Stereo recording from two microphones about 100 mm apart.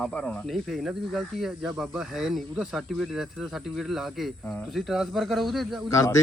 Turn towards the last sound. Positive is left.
turn(degrees=35)  # may be behind; listen again after turning